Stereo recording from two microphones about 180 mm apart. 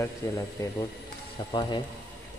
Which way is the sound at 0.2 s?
15° left (ahead or behind).